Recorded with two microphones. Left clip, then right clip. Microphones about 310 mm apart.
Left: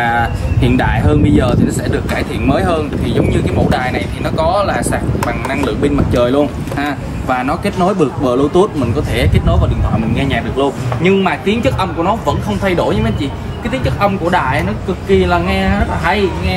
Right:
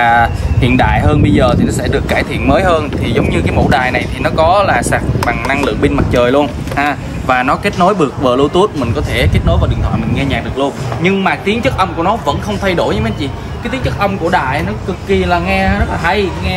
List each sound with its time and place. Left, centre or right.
0.0 s speech: centre